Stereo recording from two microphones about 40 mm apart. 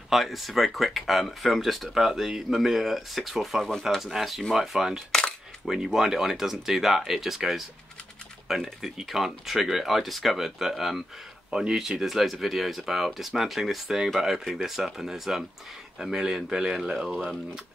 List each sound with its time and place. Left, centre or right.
0.1 s speech: centre
4.6 s speech: centre
11.5 s speech: centre
12.0 s speech: centre